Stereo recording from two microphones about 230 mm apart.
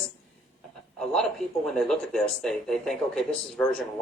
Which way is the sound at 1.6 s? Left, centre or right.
Centre.